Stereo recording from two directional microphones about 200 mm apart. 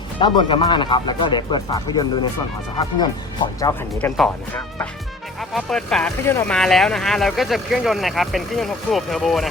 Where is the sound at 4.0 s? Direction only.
5° left (ahead or behind).